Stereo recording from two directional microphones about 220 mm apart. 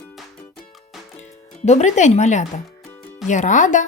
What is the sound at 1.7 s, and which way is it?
Speech, 30° left (ahead or behind).